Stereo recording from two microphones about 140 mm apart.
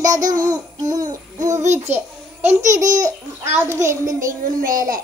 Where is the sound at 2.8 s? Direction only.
65° right (ahead or behind).